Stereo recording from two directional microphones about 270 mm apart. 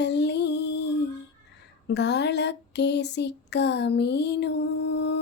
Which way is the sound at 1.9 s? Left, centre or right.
Left.